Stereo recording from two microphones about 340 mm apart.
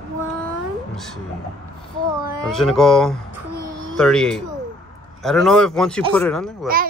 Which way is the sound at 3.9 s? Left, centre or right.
Centre.